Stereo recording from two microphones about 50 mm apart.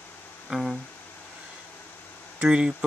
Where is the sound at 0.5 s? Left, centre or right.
Centre.